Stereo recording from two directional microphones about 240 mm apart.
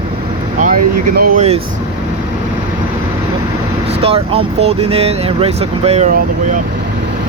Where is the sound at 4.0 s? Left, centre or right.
Right.